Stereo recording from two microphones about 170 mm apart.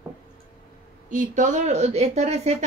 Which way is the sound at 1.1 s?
50° right (ahead or behind).